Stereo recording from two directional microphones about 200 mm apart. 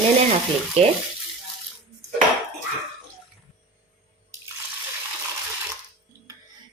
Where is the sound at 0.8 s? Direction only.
30° right (ahead or behind).